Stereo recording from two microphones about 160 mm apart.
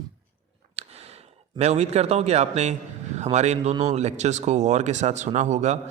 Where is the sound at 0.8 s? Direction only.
40° right (ahead or behind).